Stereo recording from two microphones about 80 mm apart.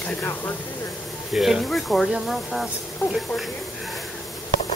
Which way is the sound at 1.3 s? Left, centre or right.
Centre.